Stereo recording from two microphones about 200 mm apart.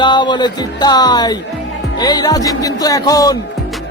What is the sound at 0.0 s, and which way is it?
Music, 25° left (ahead or behind).